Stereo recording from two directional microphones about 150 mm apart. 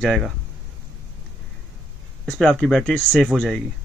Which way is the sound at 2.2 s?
5° left (ahead or behind).